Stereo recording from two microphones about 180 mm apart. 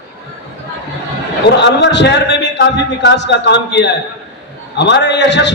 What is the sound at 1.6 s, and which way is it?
A man's voice, 75° left (ahead or behind).